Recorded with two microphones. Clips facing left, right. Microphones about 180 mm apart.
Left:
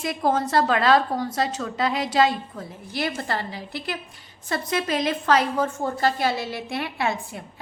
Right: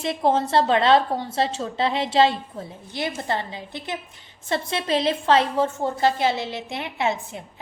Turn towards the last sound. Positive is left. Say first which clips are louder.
# right 1 dB
turn(degrees=-20)  # may be behind; listen again after turning